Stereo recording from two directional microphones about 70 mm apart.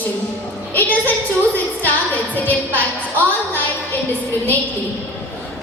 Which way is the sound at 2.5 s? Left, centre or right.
Left.